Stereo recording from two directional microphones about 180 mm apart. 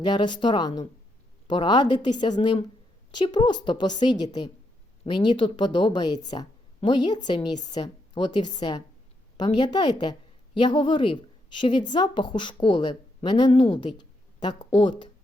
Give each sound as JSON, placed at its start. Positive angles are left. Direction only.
{"t": 0.0, "sound": "a woman's voice", "side_deg": 25}